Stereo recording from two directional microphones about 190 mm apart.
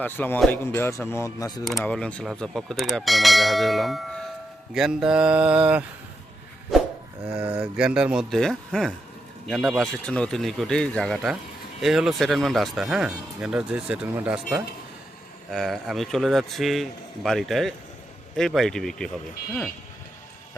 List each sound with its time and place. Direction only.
0.0 s speech: 10° left (ahead or behind)
1.6 s speech: 5° left (ahead or behind)
6.7 s a sound: centre (ahead or behind)
7.3 s speech: 5° right (ahead or behind)
15.4 s speech: centre (ahead or behind)